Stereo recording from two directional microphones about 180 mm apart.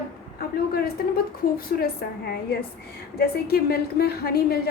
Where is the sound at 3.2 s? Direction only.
60° left (ahead or behind).